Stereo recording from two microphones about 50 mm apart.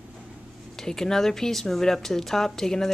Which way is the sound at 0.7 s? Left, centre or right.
Centre.